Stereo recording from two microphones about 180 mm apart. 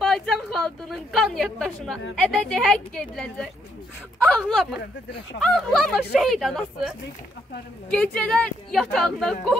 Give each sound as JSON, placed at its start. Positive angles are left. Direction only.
{"t": 0.0, "sound": "a woman's voice", "side_deg": 0}
{"t": 4.7, "sound": "speech", "side_deg": 65}
{"t": 5.4, "sound": "speech", "side_deg": 0}